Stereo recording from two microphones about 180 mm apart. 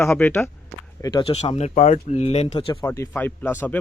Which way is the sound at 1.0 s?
25° left (ahead or behind).